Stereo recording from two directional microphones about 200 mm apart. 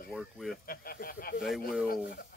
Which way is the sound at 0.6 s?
50° left (ahead or behind).